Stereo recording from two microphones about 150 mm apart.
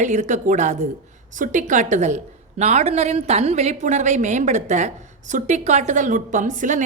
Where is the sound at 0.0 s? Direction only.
55° right (ahead or behind).